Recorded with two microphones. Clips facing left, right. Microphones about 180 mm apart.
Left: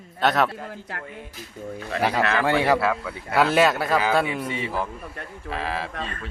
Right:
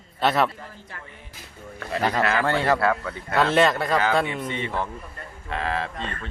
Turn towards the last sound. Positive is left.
turn(degrees=5)  # may be behind; listen again after turning